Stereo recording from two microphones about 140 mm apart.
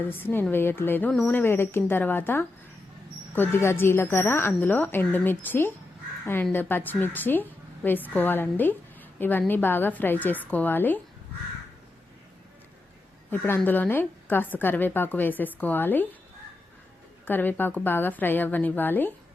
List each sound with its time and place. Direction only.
0.1 s a woman's voice: 15° left (ahead or behind)
13.3 s a woman's voice: 15° left (ahead or behind)
17.2 s a woman's voice: 15° left (ahead or behind)